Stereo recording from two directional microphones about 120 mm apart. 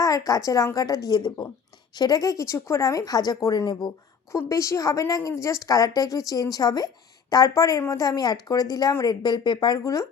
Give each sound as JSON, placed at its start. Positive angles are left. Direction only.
{"t": 0.0, "sound": "a woman's voice", "side_deg": 30}